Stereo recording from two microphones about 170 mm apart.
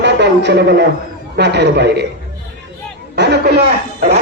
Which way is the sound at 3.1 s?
75° right (ahead or behind).